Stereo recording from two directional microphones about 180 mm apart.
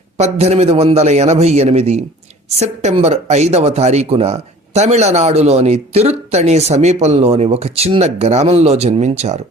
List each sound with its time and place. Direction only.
0.2 s speech: 35° right (ahead or behind)